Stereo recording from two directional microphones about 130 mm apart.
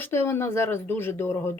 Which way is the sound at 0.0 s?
20° left (ahead or behind).